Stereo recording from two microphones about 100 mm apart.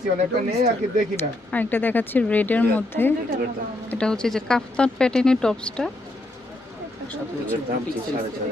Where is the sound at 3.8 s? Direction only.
10° left (ahead or behind).